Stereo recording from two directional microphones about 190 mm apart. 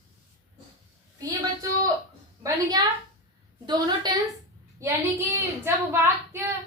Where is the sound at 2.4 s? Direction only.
20° right (ahead or behind).